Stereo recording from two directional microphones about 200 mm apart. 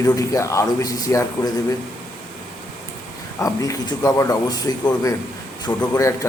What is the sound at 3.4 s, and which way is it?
A man's voice, 15° left (ahead or behind).